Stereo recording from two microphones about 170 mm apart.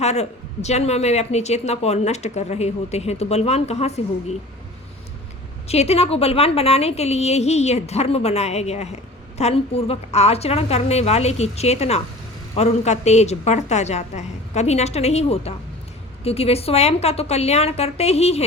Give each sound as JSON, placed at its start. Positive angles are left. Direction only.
{"t": 0.0, "sound": "a woman's voice", "side_deg": 40}
{"t": 5.6, "sound": "a woman's voice", "side_deg": 40}